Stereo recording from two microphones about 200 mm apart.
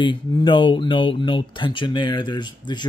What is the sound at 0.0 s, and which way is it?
Speech, 25° left (ahead or behind).